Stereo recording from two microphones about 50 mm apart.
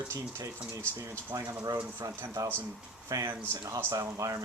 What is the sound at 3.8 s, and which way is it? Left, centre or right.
Speech, right.